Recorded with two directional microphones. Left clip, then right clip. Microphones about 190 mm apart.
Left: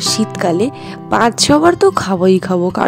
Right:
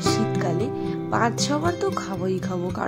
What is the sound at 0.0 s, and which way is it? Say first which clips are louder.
Speech: left 7 dB; 50° left (ahead or behind).